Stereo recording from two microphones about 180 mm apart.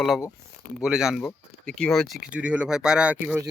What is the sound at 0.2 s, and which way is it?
Speech, 10° left (ahead or behind).